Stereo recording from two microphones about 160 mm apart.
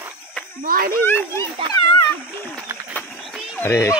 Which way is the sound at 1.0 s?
15° left (ahead or behind).